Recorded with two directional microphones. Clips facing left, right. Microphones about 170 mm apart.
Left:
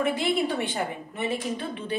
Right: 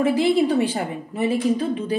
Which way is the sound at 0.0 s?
30° right (ahead or behind).